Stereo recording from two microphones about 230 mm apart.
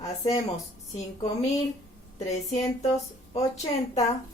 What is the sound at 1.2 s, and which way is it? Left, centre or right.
A woman's voice, left.